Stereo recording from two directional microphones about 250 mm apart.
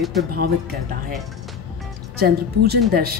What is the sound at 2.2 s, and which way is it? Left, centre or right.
A woman's voice, right.